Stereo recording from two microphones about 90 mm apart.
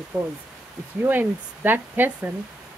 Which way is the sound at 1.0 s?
20° right (ahead or behind).